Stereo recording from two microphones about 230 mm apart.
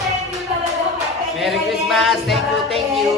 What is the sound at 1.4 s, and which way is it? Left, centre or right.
Music, centre.